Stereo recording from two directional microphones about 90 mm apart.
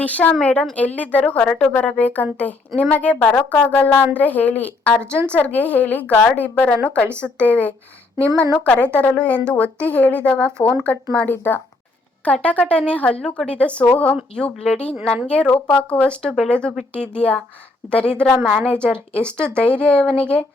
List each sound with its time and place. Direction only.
0.0 s a woman's voice: 15° left (ahead or behind)